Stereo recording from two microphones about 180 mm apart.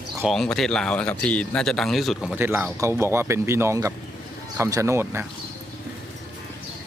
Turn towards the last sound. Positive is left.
turn(degrees=-15)  # may be behind; listen again after turning